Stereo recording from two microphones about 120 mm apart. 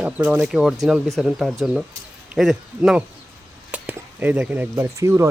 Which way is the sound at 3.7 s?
15° right (ahead or behind).